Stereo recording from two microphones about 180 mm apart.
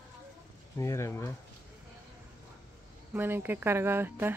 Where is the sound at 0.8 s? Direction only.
15° left (ahead or behind).